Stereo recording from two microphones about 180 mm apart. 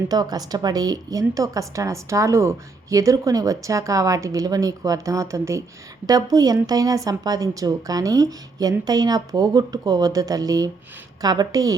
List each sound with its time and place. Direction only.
0.1 s a woman's voice: 20° right (ahead or behind)